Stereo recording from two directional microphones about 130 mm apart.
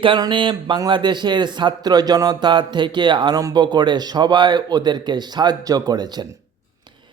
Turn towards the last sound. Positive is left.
turn(degrees=-30)  # may be behind; listen again after turning